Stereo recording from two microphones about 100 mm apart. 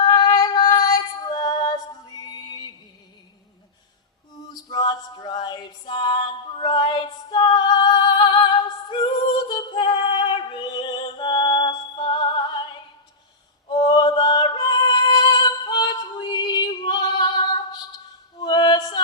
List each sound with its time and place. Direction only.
0.0 s female singing: 45° left (ahead or behind)
4.4 s music: 45° left (ahead or behind)
8.9 s female singing: 50° left (ahead or behind)
13.7 s music: 50° left (ahead or behind)
18.3 s a capella: 50° left (ahead or behind)